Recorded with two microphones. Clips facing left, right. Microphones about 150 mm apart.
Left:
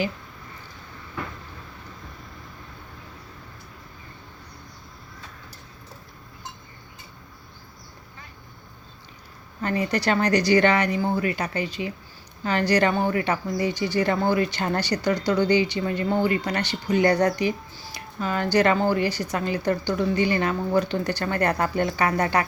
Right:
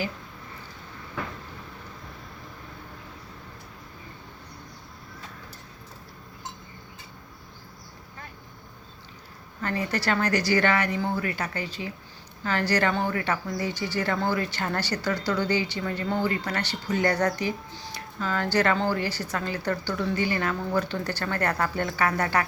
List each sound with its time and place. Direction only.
9.6 s a woman's voice: 15° left (ahead or behind)